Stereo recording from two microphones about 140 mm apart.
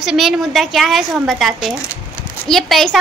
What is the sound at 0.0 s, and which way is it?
Speech, centre (ahead or behind).